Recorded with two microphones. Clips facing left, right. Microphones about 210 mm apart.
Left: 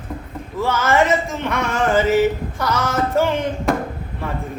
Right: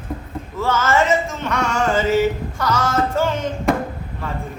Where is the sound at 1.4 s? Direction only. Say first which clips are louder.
Even; 15° left (ahead or behind).